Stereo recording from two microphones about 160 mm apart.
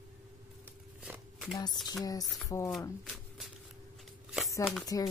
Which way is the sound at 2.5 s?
20° left (ahead or behind).